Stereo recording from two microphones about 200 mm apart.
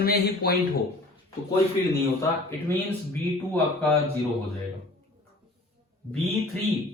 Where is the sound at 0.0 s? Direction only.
50° left (ahead or behind).